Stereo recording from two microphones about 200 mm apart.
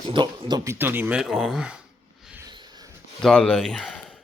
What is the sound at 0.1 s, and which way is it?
Speech, 20° right (ahead or behind).